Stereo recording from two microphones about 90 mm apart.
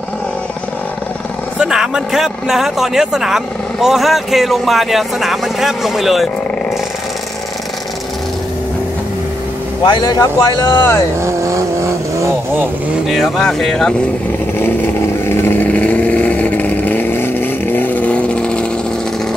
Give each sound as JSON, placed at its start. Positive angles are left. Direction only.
{"t": 1.6, "sound": "speech", "side_deg": -5}
{"t": 9.8, "sound": "speech", "side_deg": 55}
{"t": 11.1, "sound": "vehicle", "side_deg": -35}
{"t": 13.1, "sound": "speech", "side_deg": 5}
{"t": 14.6, "sound": "vehicle", "side_deg": 25}